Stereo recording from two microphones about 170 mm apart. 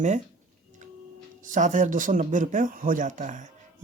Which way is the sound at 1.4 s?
50° right (ahead or behind).